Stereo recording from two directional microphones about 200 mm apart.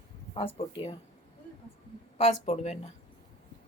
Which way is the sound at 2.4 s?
30° left (ahead or behind).